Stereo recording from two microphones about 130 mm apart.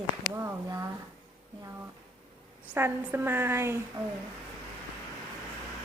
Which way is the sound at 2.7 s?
15° right (ahead or behind).